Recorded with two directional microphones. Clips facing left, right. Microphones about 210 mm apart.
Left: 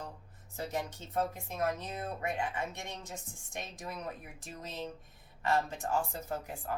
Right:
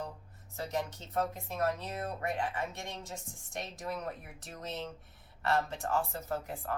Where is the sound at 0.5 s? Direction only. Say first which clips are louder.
Right 1 dB; 15° left (ahead or behind).